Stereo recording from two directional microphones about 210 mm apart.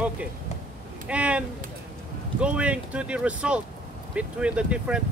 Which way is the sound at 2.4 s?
5° right (ahead or behind).